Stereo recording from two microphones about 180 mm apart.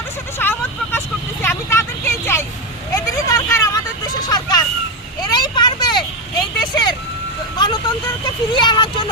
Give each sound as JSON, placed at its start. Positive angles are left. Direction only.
{"t": 0.3, "sound": "vehicle", "side_deg": 10}
{"t": 4.3, "sound": "hubbub", "side_deg": 20}
{"t": 5.3, "sound": "vehicle", "side_deg": 25}